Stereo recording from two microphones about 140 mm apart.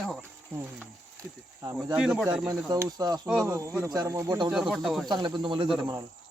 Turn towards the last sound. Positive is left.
turn(degrees=-35)  # may be behind; listen again after turning